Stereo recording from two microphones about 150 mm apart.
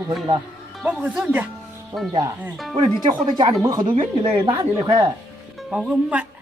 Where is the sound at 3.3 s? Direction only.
30° right (ahead or behind).